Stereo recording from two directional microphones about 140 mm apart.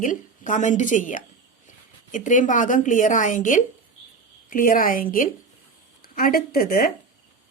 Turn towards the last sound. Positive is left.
turn(degrees=90)